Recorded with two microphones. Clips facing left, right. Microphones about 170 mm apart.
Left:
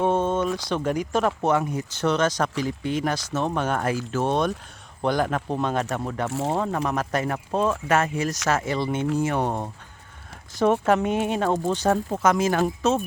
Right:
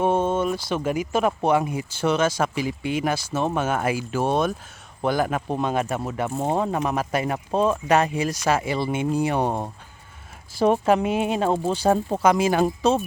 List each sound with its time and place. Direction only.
0.0 s a sound: 10° right (ahead or behind)
0.7 s speech: 5° right (ahead or behind)
10.8 s speech: 10° right (ahead or behind)